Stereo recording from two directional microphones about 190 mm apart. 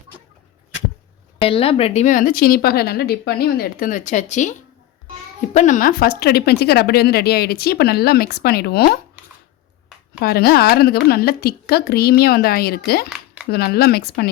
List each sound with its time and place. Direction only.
1.4 s speech: 30° left (ahead or behind)
5.5 s speech: 40° left (ahead or behind)
10.2 s speech: 55° left (ahead or behind)
13.1 s a sound: 5° right (ahead or behind)
13.5 s speech: 55° left (ahead or behind)